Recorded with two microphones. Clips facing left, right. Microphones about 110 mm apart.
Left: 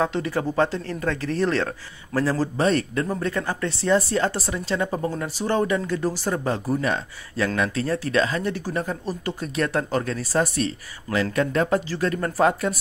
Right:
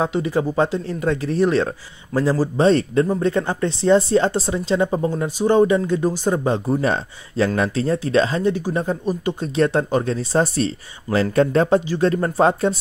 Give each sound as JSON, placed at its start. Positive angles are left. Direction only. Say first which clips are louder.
{"t": 0.0, "sound": "speech", "louder": "right 3 dB", "side_deg": -15}
{"t": 2.6, "sound": "speech", "louder": "right 7 dB", "side_deg": -25}